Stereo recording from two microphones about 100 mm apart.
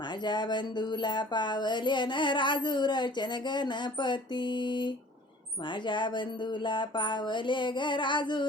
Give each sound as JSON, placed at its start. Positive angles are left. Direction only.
{"t": 0.3, "sound": "music", "side_deg": 45}